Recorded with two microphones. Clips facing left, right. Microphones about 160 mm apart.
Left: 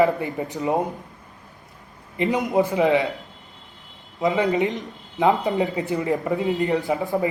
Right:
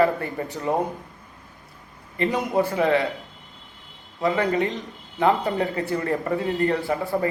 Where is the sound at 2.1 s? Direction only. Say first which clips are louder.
Left 2 dB; 20° left (ahead or behind).